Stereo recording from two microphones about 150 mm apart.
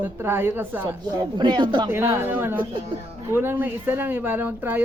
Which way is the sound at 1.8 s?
15° right (ahead or behind).